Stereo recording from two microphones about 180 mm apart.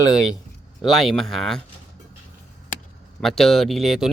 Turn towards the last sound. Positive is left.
turn(degrees=0)  # may be behind; listen again after turning